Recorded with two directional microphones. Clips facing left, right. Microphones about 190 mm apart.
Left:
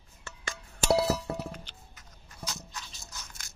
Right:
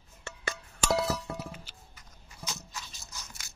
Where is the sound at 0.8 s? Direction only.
30° left (ahead or behind).